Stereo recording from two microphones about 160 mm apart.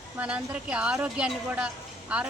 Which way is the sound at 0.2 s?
5° right (ahead or behind).